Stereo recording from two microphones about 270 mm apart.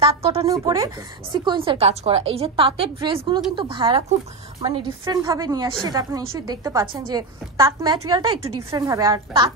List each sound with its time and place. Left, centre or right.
0.0 s a woman's voice: right